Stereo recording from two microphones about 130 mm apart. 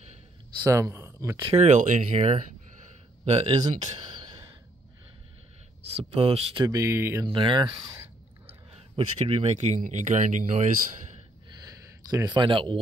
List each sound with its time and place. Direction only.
0.7 s speech: 20° right (ahead or behind)
1.4 s speech: 55° right (ahead or behind); by 2.0 s 80° right
2.0 s speech: 60° right (ahead or behind)
3.8 s a sound: 40° right (ahead or behind)
5.9 s speech: 50° right (ahead or behind)
6.6 s speech: 25° right (ahead or behind)
7.2 s speech: 40° right (ahead or behind)
8.7 s speech: 50° right (ahead or behind); by 11.1 s 70° right (ahead or behind)
11.6 s a sound: 30° right (ahead or behind)